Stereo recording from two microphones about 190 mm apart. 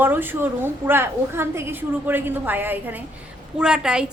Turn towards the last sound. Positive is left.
turn(degrees=-5)  # may be behind; listen again after turning